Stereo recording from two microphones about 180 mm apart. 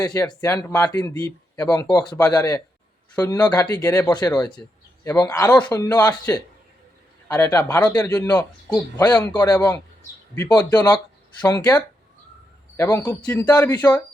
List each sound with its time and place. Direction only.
0.0 s a man's voice: 20° left (ahead or behind)
7.3 s a man's voice: 10° left (ahead or behind)